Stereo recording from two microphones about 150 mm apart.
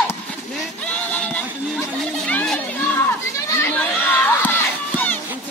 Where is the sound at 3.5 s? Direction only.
15° left (ahead or behind).